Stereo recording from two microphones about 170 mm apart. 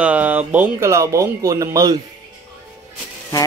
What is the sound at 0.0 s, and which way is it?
Speech, 10° right (ahead or behind).